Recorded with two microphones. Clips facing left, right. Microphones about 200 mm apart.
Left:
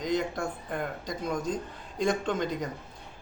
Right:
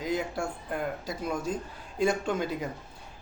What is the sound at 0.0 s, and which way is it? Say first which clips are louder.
A man's voice: left 1 dB; 5° right (ahead or behind).